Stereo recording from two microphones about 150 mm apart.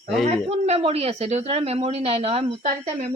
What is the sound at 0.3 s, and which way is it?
A woman's voice, 45° right (ahead or behind).